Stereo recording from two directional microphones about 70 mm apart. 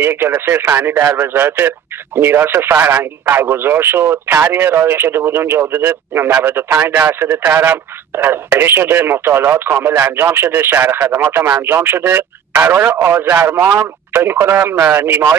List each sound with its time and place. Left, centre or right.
0.0 s speech: right